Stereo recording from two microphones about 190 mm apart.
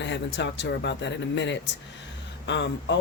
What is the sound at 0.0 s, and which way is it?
Speech, 70° left (ahead or behind).